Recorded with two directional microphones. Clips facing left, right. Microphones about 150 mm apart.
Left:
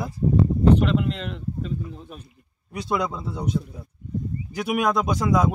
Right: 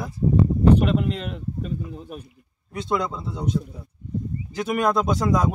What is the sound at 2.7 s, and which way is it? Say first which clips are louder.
Speech: even; 15° left (ahead or behind).